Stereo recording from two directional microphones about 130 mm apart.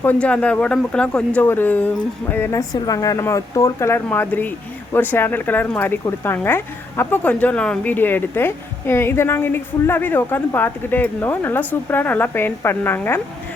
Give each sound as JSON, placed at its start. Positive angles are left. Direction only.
{"t": 0.0, "sound": "speech", "side_deg": 10}